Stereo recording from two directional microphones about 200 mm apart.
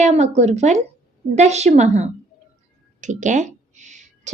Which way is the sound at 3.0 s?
40° right (ahead or behind).